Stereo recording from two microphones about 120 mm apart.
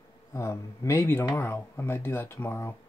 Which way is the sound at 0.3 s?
25° left (ahead or behind).